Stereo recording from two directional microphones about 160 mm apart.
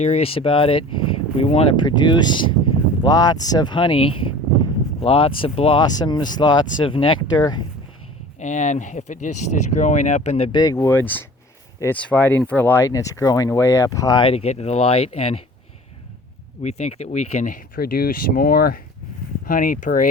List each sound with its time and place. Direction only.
0.0 s speech: 40° left (ahead or behind); by 7.6 s 25° left (ahead or behind)
8.4 s speech: 50° left (ahead or behind)
10.5 s speech: 25° left (ahead or behind)
16.6 s speech: 45° left (ahead or behind); by 18.8 s 70° left (ahead or behind)
19.5 s speech: 60° left (ahead or behind)